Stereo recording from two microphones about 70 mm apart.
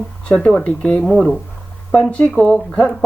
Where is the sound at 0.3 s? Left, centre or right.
Centre.